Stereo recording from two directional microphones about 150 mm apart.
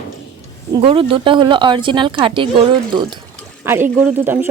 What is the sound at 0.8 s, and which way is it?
Speech, 35° right (ahead or behind).